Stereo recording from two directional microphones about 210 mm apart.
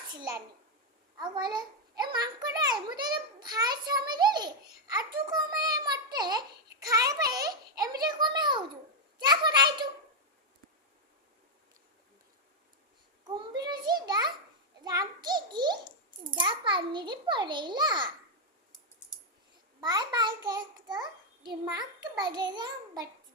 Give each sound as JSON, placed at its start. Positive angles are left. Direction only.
{"t": 0.1, "sound": "a child's voice", "side_deg": -20}
{"t": 13.2, "sound": "a sound", "side_deg": -20}
{"t": 16.3, "sound": "a child's voice", "side_deg": -25}
{"t": 19.8, "sound": "a child's voice", "side_deg": -20}